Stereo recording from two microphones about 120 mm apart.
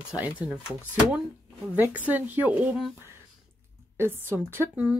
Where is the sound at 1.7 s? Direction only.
15° right (ahead or behind).